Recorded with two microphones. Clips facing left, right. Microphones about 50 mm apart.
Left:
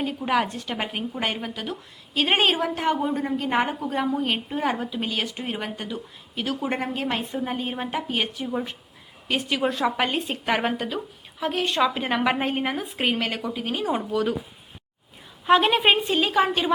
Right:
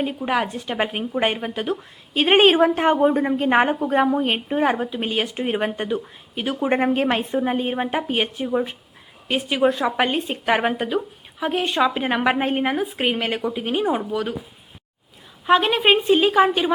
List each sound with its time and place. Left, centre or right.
0.0 s a woman's voice: centre; by 6.0 s right
6.3 s a woman's voice: centre
6.8 s a woman's voice: right
13.9 s a woman's voice: centre
15.4 s a woman's voice: centre